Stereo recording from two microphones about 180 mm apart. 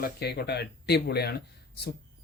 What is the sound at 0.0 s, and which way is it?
Speech, 60° left (ahead or behind).